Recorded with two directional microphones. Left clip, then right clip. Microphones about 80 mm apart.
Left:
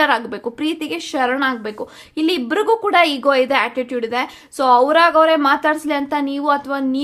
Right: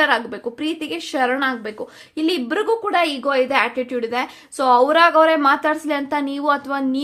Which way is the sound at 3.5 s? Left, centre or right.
Centre.